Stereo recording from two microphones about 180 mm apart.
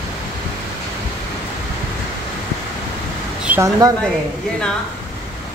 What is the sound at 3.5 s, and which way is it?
Speech, 15° right (ahead or behind).